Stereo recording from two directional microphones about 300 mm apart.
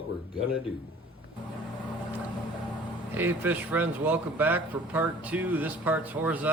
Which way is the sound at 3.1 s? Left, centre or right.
Centre.